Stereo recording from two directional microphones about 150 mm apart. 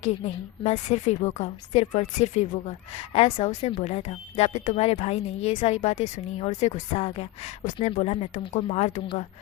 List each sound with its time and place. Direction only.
0.6 s a woman's voice: 50° left (ahead or behind)